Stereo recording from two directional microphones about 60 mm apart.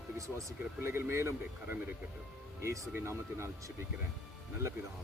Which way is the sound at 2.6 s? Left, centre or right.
Right.